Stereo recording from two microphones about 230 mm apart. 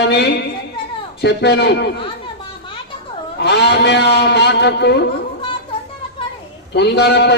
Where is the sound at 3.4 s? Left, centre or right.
Left.